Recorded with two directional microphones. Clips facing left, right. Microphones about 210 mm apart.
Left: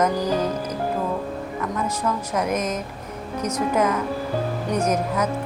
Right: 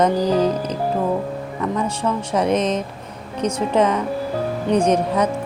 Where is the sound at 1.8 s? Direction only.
30° right (ahead or behind).